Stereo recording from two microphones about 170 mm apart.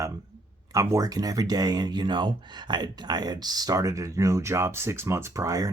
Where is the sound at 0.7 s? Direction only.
20° right (ahead or behind).